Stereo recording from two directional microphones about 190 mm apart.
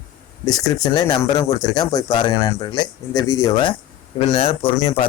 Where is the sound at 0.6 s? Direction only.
20° left (ahead or behind).